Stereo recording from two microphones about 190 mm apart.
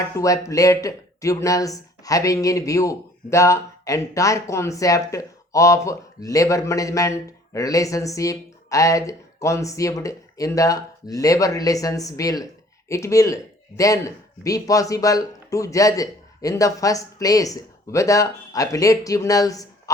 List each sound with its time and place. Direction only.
0.2 s speech: 15° left (ahead or behind)